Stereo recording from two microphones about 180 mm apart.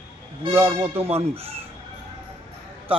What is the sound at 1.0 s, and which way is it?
Speech, 35° right (ahead or behind).